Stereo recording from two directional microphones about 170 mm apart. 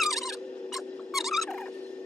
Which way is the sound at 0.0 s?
Centre (ahead or behind).